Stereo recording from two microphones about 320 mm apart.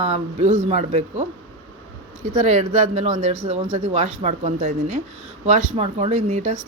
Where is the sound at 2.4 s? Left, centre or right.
Right.